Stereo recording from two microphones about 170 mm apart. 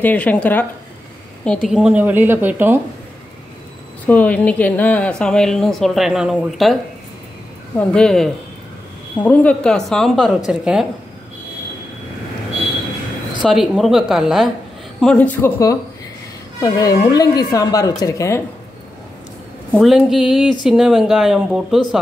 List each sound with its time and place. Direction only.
0.0 s a woman's voice: 10° left (ahead or behind); by 2.8 s 10° right (ahead or behind)
4.0 s a woman's voice: 10° left (ahead or behind)
7.9 s a woman's voice: 5° left (ahead or behind)
13.4 s a woman's voice: centre (ahead or behind)
16.6 s a woman's voice: 20° left (ahead or behind)
19.8 s a woman's voice: 5° right (ahead or behind)